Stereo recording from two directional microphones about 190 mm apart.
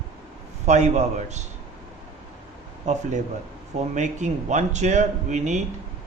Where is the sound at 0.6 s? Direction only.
35° right (ahead or behind).